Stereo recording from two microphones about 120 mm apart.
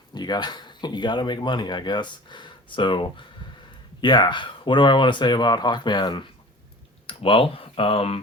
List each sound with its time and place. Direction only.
0.1 s speech: 35° left (ahead or behind); by 8.2 s 55° left (ahead or behind)